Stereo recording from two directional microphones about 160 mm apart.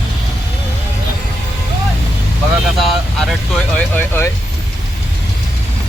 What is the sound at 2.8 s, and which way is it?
Speech, centre (ahead or behind).